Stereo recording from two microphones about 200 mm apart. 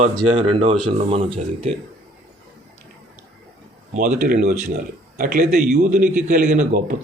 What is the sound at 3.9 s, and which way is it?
A man's voice, 45° right (ahead or behind).